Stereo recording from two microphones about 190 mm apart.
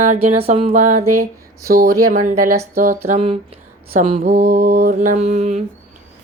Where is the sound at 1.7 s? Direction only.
50° right (ahead or behind).